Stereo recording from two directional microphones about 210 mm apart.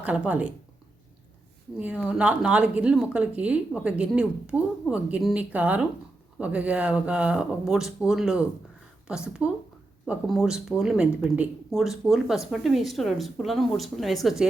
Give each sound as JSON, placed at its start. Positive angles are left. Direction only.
{"t": 0.0, "sound": "speech", "side_deg": -5}
{"t": 1.8, "sound": "speech", "side_deg": -5}